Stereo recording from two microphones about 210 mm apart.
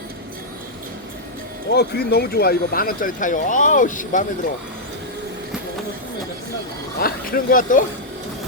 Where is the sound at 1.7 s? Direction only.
50° left (ahead or behind).